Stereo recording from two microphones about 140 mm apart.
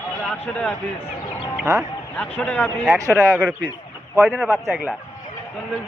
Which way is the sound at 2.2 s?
10° left (ahead or behind).